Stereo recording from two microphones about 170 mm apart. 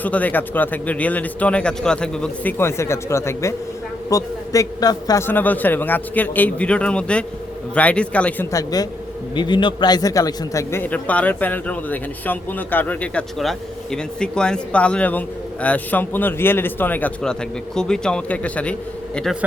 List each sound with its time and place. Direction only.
0.0 s a man's voice: 10° left (ahead or behind)
8.5 s a man's voice: 20° left (ahead or behind); by 19.4 s 5° left (ahead or behind)